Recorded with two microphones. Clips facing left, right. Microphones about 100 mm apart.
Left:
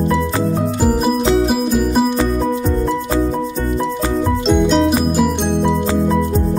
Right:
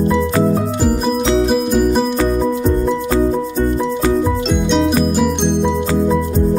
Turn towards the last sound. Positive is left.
turn(degrees=0)  # may be behind; listen again after turning